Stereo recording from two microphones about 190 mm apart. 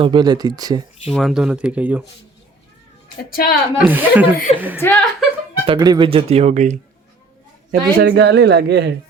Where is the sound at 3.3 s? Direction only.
50° left (ahead or behind).